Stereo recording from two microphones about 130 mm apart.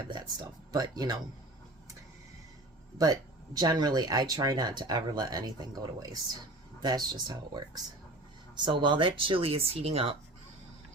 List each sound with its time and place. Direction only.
0.1 s speech: 30° right (ahead or behind)
3.0 s speech: 30° right (ahead or behind); by 10.2 s 45° right (ahead or behind)